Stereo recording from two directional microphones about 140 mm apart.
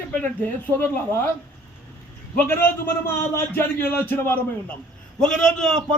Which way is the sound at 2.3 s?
15° left (ahead or behind).